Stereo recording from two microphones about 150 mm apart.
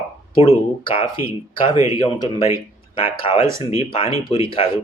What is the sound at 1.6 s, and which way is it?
Speech, 20° right (ahead or behind).